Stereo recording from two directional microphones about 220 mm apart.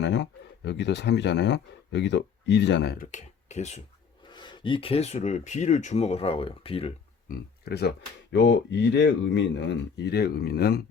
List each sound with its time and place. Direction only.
0.0 s speech: 50° left (ahead or behind)
3.1 s speech: 30° left (ahead or behind)
4.3 s speech: 20° left (ahead or behind)
7.3 s speech: 45° left (ahead or behind)